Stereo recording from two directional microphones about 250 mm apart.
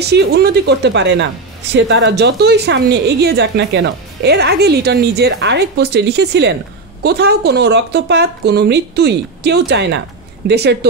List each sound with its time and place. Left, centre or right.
0.0 s a woman's voice: right